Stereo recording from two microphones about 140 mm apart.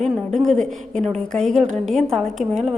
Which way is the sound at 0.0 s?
5° left (ahead or behind).